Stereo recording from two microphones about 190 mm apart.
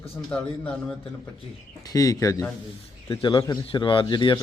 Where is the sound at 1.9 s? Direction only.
15° left (ahead or behind).